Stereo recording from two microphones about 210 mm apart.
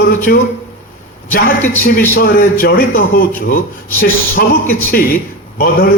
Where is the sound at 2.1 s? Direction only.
45° left (ahead or behind).